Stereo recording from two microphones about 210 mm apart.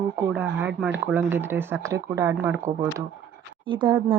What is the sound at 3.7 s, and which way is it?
Speech, 25° right (ahead or behind).